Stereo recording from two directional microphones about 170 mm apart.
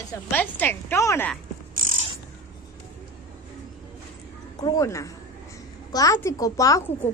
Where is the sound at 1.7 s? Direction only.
55° right (ahead or behind).